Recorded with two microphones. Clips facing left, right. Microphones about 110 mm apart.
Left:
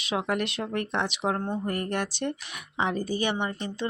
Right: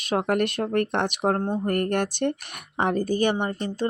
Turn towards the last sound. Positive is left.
turn(degrees=-45)  # may be behind; listen again after turning